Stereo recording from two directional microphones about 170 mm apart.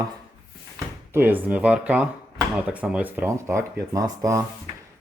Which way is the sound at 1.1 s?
10° right (ahead or behind).